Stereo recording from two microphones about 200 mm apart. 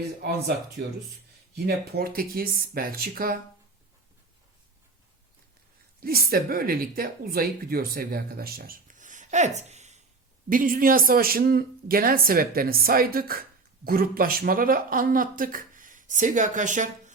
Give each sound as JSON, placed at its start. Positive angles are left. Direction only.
{"t": 0.2, "sound": "speech", "side_deg": -50}
{"t": 6.0, "sound": "speech", "side_deg": -50}
{"t": 9.6, "sound": "a sound", "side_deg": -35}
{"t": 10.5, "sound": "speech", "side_deg": -45}